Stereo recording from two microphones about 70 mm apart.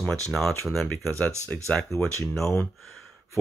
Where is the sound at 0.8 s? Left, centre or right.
Left.